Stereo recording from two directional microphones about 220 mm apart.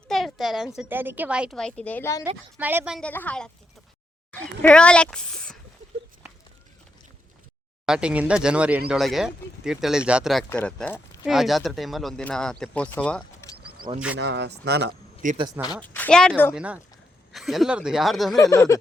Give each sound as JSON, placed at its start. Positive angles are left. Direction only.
{"t": 0.1, "sound": "a sound", "side_deg": 0}
{"t": 0.8, "sound": "speech", "side_deg": -10}
{"t": 2.6, "sound": "speech", "side_deg": -10}
{"t": 7.9, "sound": "speech", "side_deg": -5}
{"t": 14.2, "sound": "speech", "side_deg": -50}
{"t": 15.2, "sound": "speech", "side_deg": -35}
{"t": 15.8, "sound": "a woman's voice", "side_deg": 5}
{"t": 16.6, "sound": "speech", "side_deg": -5}
{"t": 18.3, "sound": "speech", "side_deg": 15}